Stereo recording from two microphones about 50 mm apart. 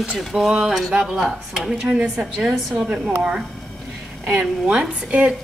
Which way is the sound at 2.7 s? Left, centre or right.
Right.